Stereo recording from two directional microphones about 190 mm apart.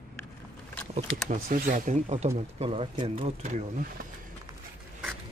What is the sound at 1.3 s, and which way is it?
Speech, 45° right (ahead or behind).